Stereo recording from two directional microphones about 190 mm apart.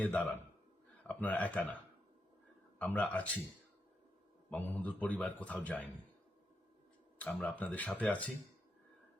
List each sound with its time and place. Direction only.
0.0 s a man's voice: 10° left (ahead or behind)
2.7 s a man's voice: 5° left (ahead or behind)
4.4 s a man's voice: 10° left (ahead or behind)
7.2 s a man's voice: 5° left (ahead or behind)